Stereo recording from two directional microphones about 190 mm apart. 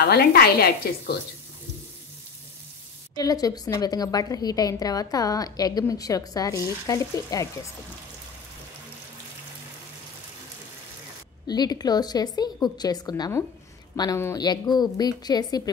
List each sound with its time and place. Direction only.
0.0 s a woman's voice: 55° left (ahead or behind)
3.2 s a woman's voice: 20° left (ahead or behind)
11.4 s a woman's voice: 20° left (ahead or behind)